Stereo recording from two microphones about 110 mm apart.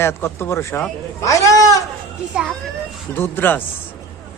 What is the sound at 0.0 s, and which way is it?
Speech, 20° left (ahead or behind).